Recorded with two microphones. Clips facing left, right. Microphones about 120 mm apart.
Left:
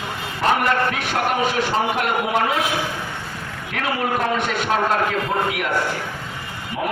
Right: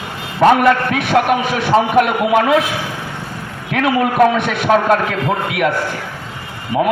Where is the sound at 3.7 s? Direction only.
70° right (ahead or behind).